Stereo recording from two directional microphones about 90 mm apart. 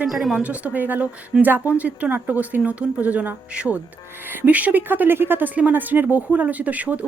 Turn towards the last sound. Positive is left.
turn(degrees=-15)  # may be behind; listen again after turning